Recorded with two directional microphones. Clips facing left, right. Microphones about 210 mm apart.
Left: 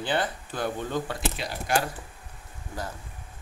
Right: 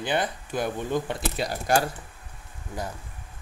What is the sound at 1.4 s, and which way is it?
Speech, 40° right (ahead or behind).